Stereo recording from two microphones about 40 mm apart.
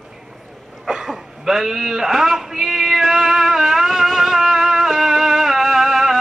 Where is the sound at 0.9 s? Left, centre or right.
Centre.